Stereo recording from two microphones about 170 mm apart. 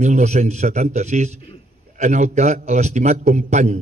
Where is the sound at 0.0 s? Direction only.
40° right (ahead or behind).